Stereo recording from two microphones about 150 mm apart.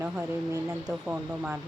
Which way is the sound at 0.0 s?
15° right (ahead or behind).